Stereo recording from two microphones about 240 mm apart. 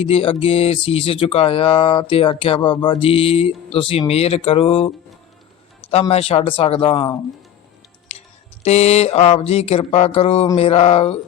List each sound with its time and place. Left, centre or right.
0.0 s speech: left
5.9 s speech: left
8.6 s speech: left